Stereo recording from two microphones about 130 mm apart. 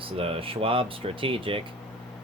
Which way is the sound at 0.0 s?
45° right (ahead or behind).